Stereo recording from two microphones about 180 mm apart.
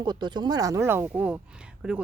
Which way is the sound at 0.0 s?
25° right (ahead or behind).